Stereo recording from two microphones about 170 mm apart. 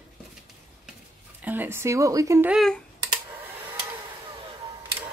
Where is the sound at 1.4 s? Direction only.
10° right (ahead or behind).